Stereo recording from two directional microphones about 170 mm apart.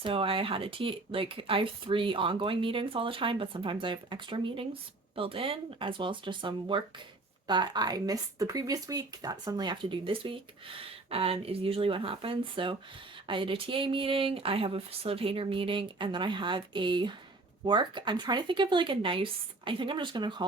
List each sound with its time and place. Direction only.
0.0 s speech: 30° right (ahead or behind)